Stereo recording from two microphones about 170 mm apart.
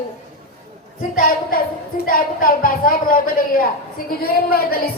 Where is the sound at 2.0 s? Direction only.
55° left (ahead or behind).